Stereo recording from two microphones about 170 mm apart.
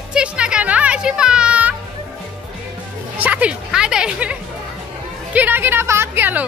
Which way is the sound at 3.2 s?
10° right (ahead or behind).